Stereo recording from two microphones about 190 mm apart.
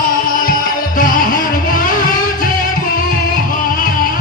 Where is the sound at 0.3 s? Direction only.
45° left (ahead or behind).